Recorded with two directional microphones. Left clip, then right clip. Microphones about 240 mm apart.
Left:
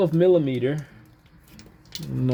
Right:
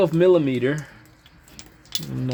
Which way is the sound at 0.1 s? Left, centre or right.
Centre.